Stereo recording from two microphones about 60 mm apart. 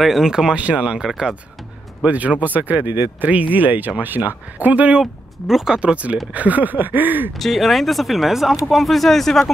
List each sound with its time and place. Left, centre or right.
0.0 s speech: centre
1.0 s speech: centre
2.0 s speech: right
5.0 s speech: centre
5.8 s speech: right
7.3 s speech: centre